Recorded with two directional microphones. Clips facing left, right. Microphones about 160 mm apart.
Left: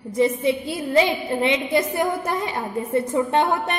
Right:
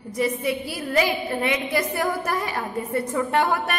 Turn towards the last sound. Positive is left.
turn(degrees=25)  # may be behind; listen again after turning